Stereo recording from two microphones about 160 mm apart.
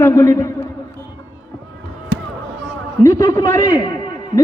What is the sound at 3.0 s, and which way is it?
Speech, 20° left (ahead or behind).